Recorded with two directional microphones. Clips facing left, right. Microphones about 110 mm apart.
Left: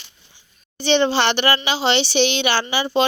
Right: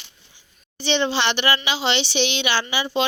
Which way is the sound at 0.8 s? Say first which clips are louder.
Left 4 dB; 45° left (ahead or behind).